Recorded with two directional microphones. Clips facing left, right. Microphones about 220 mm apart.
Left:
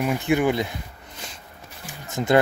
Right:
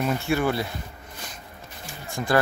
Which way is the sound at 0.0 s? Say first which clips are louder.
Left 3 dB; 15° left (ahead or behind).